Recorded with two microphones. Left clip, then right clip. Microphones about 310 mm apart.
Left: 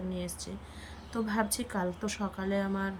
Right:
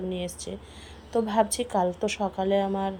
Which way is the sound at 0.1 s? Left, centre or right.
Centre.